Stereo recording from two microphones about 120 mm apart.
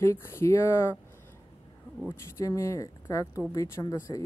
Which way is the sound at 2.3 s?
25° left (ahead or behind).